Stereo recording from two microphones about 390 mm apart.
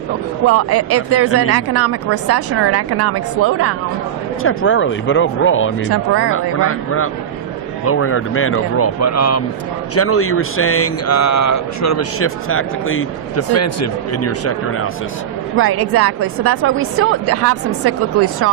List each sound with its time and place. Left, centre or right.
0.4 s a woman's voice: right
4.4 s speech: left
5.9 s a woman's voice: right
6.3 s speech: left
15.5 s a woman's voice: right